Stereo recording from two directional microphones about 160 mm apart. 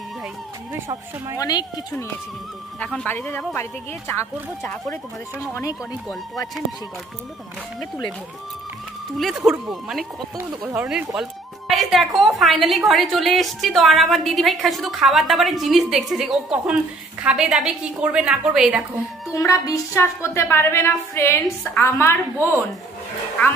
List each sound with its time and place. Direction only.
0.7 s speech: 20° right (ahead or behind)
1.4 s speech: 25° left (ahead or behind)
2.8 s a woman's voice: 5° left (ahead or behind)
5.4 s a woman's voice: 20° left (ahead or behind)
9.5 s a woman's voice: centre (ahead or behind)
19.3 s a woman's voice: 20° left (ahead or behind)